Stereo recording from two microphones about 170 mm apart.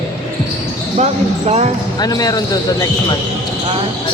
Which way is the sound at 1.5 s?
40° right (ahead or behind).